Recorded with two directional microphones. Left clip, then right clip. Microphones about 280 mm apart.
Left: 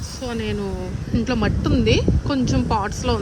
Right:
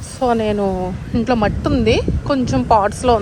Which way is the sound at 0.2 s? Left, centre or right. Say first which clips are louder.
Right 11 dB; centre.